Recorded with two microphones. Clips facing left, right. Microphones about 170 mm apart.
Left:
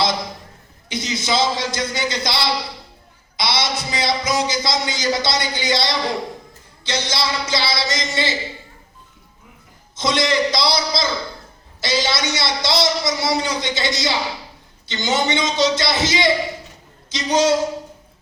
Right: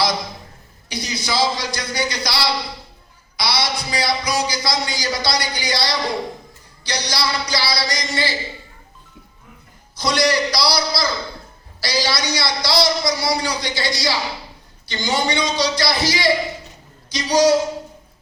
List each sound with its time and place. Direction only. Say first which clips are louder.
0.9 s a man's voice: left 3 dB; 20° left (ahead or behind)
9.9 s a man's voice: right 1 dB; 20° left (ahead or behind)